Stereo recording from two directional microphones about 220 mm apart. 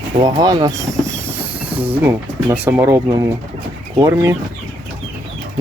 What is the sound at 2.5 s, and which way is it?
Speech, 10° right (ahead or behind).